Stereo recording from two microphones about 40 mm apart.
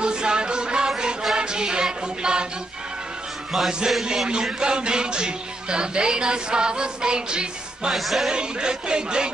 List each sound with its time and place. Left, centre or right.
0.0 s music: right
3.5 s music: centre
4.3 s speech: right
7.9 s music: centre
8.3 s speech: right